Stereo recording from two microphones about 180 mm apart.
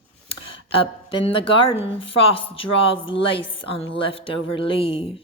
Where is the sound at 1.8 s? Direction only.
30° left (ahead or behind).